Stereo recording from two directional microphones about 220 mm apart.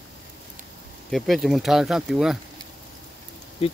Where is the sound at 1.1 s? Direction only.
Centre (ahead or behind).